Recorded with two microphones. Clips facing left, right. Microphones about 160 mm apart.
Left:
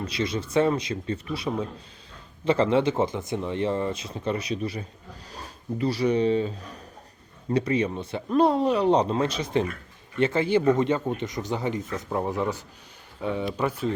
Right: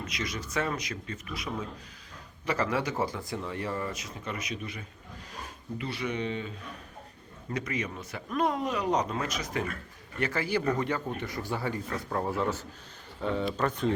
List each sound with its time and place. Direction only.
0.0 s speech: 30° left (ahead or behind)
7.5 s speech: 30° left (ahead or behind); by 13.9 s 10° left (ahead or behind)